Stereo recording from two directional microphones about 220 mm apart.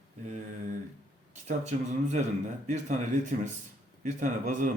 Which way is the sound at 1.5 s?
30° right (ahead or behind).